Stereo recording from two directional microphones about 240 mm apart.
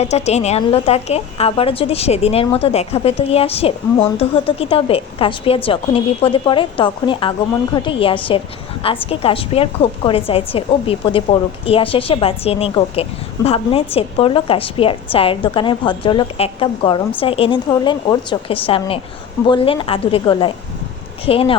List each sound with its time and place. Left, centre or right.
0.0 s a woman's voice: left